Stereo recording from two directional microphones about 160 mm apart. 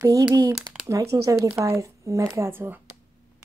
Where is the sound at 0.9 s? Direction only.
20° right (ahead or behind).